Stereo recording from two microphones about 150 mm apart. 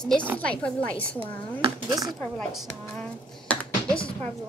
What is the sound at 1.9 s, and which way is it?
Speech, 25° right (ahead or behind).